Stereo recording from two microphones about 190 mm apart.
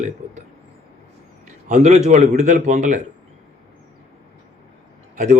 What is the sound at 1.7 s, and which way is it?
A man's voice, 40° right (ahead or behind).